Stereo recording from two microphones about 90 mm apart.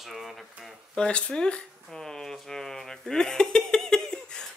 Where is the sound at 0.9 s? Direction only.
10° left (ahead or behind).